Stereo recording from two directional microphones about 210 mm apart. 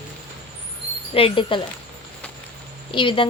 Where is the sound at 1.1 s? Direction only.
25° left (ahead or behind).